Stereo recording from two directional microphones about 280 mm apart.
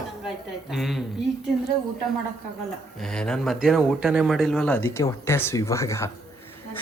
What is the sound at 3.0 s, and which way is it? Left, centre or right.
A man's voice, centre.